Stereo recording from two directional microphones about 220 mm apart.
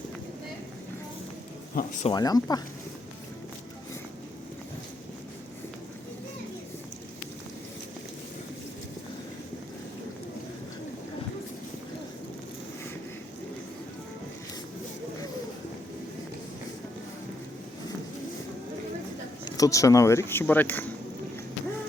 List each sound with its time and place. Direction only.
1.7 s speech: 35° left (ahead or behind)
2.1 s speech: 15° left (ahead or behind)
19.5 s speech: 15° left (ahead or behind)